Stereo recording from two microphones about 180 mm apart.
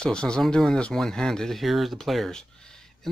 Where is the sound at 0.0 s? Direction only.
5° left (ahead or behind).